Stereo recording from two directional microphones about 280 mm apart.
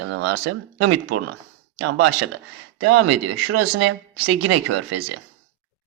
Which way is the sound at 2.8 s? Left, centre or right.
Right.